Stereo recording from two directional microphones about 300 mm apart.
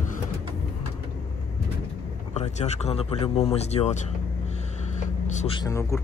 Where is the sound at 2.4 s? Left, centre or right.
Left.